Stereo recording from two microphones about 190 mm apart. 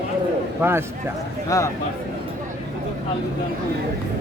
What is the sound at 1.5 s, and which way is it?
Speech, 15° left (ahead or behind).